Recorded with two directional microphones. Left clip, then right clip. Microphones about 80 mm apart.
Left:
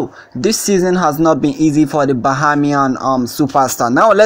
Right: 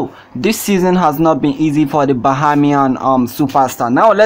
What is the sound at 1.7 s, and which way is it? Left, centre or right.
Speech, left.